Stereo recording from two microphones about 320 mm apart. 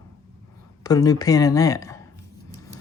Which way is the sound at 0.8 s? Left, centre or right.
Centre.